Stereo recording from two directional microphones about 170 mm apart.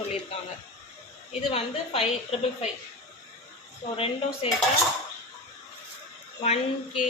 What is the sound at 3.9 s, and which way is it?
Speech, 35° left (ahead or behind).